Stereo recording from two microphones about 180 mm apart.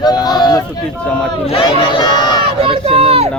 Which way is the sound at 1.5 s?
25° left (ahead or behind).